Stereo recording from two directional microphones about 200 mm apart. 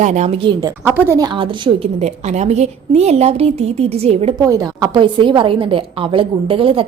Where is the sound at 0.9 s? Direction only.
10° right (ahead or behind); by 4.4 s 30° right (ahead or behind).